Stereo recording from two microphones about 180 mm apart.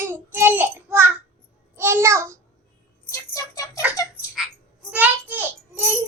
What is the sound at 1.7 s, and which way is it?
Speech, 15° right (ahead or behind).